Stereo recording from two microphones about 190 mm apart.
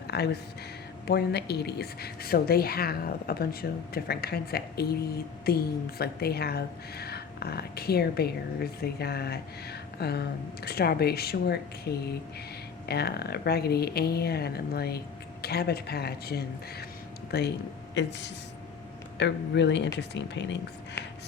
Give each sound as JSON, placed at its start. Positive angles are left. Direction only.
{"t": 0.1, "sound": "speech", "side_deg": 60}
{"t": 18.0, "sound": "speech", "side_deg": 65}
{"t": 19.2, "sound": "speech", "side_deg": 65}